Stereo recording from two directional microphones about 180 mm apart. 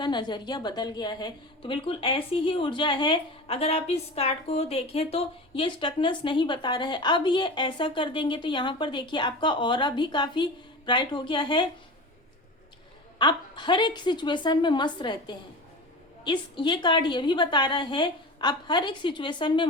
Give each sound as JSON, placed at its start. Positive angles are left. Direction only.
{"t": 0.0, "sound": "a woman's voice", "side_deg": 25}
{"t": 13.1, "sound": "a woman's voice", "side_deg": 25}